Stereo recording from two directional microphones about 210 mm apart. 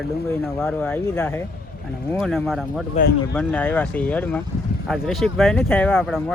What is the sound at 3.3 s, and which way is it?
Speech, 5° left (ahead or behind).